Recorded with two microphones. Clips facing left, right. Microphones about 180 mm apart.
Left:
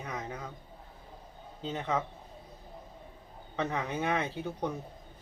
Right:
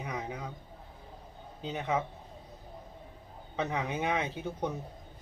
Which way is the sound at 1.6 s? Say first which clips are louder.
Even; 15° right (ahead or behind).